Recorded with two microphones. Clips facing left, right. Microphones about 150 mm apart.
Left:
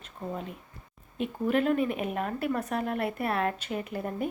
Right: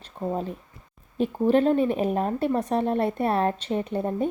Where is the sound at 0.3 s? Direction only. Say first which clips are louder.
Right 7 dB; 35° right (ahead or behind).